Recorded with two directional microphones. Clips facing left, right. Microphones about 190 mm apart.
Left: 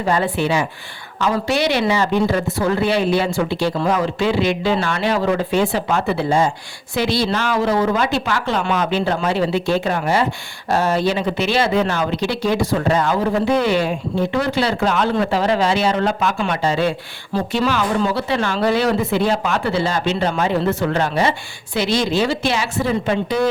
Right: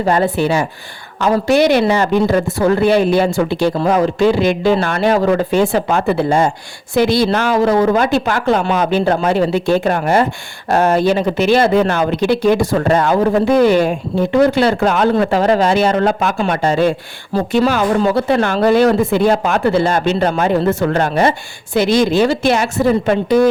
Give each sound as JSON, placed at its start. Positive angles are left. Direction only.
{"t": 0.0, "sound": "speech", "side_deg": -40}